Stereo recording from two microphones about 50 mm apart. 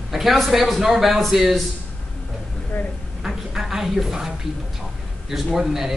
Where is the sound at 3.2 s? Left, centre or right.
Centre.